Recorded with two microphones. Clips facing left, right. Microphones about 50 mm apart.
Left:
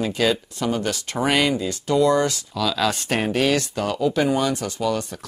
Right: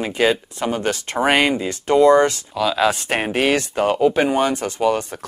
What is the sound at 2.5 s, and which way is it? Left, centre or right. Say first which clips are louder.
Speech: right 4 dB; right.